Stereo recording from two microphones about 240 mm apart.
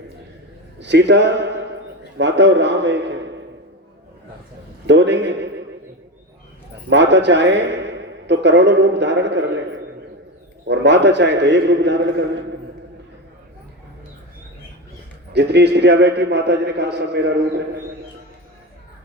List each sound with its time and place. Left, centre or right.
0.8 s a man's voice: right
4.9 s a man's voice: right
6.9 s a man's voice: right
10.7 s a man's voice: right
15.3 s a man's voice: right